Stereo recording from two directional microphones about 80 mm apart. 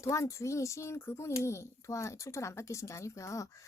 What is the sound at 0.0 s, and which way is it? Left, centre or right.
Speech, left.